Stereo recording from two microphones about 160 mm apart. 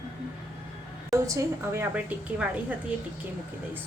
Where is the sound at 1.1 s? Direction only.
20° right (ahead or behind).